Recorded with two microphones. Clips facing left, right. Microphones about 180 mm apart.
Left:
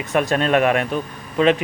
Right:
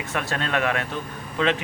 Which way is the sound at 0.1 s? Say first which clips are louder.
Left 9 dB; 20° left (ahead or behind).